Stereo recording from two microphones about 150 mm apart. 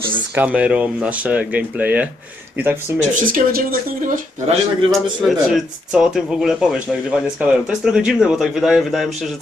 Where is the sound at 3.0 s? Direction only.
60° right (ahead or behind).